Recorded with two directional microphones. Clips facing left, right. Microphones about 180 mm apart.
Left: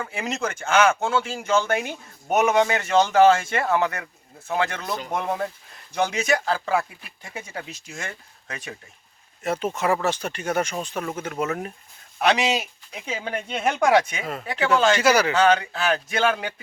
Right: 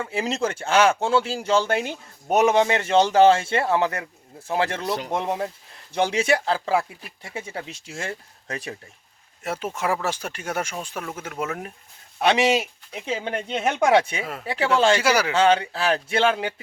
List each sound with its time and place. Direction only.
0.0 s speech: 30° right (ahead or behind)
9.4 s speech: 5° right (ahead or behind)
12.2 s speech: 25° right (ahead or behind)
14.9 s speech: 10° right (ahead or behind)
15.3 s speech: 30° right (ahead or behind)